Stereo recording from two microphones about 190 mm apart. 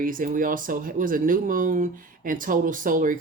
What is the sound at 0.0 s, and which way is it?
Speech, 45° right (ahead or behind).